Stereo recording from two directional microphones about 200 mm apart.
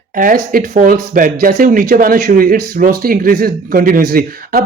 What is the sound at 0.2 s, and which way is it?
Speech, 45° right (ahead or behind).